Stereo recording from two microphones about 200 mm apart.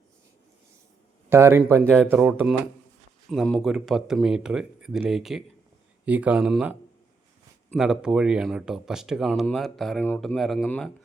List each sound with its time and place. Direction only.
1.3 s speech: 10° right (ahead or behind); by 10.8 s 5° left (ahead or behind)